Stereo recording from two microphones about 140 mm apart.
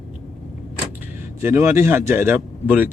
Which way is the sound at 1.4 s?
20° right (ahead or behind).